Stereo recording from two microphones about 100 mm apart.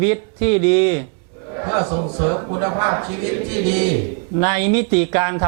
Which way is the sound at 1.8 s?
20° right (ahead or behind).